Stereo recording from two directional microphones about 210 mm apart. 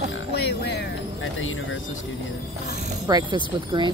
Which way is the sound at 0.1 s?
55° left (ahead or behind).